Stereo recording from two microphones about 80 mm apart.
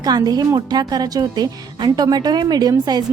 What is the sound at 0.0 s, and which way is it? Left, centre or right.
A woman's voice, right.